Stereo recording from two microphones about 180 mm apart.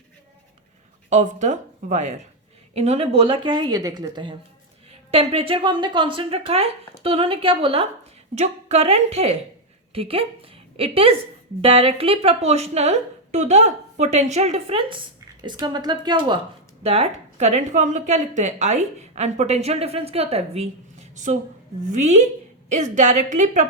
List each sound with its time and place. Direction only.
1.1 s a woman's voice: 40° right (ahead or behind)
21.8 s a woman's voice: 40° right (ahead or behind)